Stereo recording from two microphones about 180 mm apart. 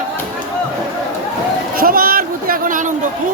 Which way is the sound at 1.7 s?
55° right (ahead or behind).